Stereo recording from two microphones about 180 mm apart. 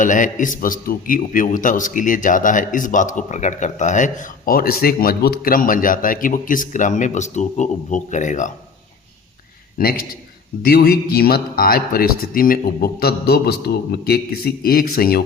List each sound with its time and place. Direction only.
0.0 s a man's voice: 45° left (ahead or behind)
9.7 s speech: 55° left (ahead or behind)